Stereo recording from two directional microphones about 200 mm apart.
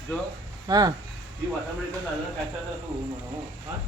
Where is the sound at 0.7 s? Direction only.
20° right (ahead or behind).